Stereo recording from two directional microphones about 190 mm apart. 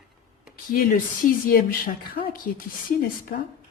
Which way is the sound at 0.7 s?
45° left (ahead or behind).